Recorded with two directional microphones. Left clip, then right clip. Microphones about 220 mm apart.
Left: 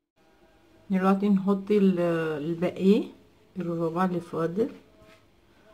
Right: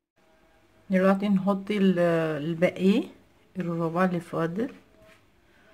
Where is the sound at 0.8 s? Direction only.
50° right (ahead or behind).